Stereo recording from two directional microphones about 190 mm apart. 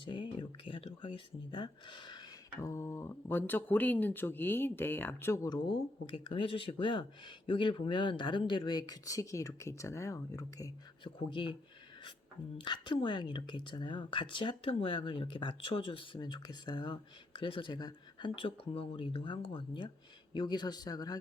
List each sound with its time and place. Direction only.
0.0 s speech: 25° left (ahead or behind)
12.5 s speech: 25° left (ahead or behind)